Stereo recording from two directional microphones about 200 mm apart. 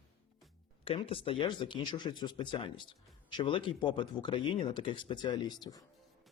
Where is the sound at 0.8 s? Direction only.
25° left (ahead or behind).